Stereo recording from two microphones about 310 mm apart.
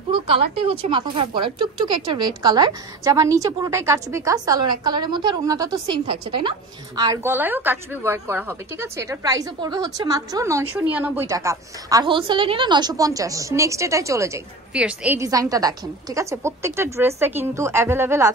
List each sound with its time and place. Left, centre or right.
0.1 s speech: centre